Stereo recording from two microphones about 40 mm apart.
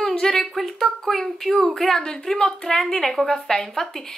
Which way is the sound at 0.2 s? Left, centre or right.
Centre.